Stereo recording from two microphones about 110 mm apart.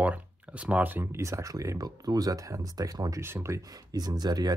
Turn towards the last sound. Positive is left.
turn(degrees=-35)  # may be behind; listen again after turning